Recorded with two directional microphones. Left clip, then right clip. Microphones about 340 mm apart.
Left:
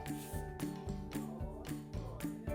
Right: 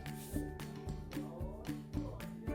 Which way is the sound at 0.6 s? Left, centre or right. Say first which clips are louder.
Left 4 dB; centre.